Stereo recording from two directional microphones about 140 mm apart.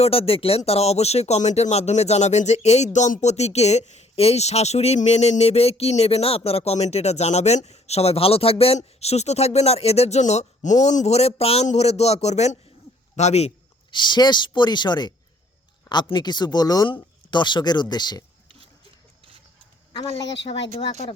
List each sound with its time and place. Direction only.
0.0 s speech: 45° left (ahead or behind)
13.9 s speech: 35° left (ahead or behind)